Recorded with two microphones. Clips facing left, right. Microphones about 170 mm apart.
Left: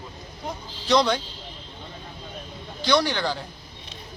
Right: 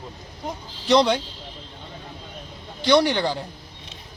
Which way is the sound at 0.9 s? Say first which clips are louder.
Right 3 dB; 25° right (ahead or behind).